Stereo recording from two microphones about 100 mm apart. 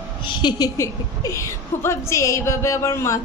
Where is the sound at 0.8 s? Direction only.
30° left (ahead or behind).